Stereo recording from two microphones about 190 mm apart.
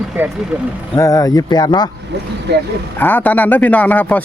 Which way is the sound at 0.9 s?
15° left (ahead or behind).